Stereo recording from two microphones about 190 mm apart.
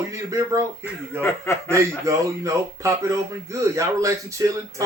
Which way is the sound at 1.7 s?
15° right (ahead or behind).